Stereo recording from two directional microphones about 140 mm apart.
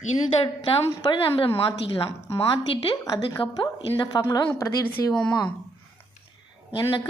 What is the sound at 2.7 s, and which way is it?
A woman's voice, 30° left (ahead or behind).